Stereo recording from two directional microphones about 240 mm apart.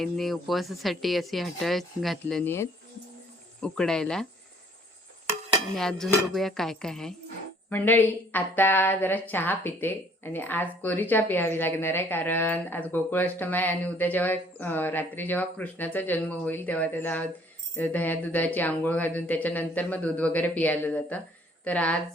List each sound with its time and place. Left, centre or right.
0.0 s speech: centre
5.7 s a woman's voice: centre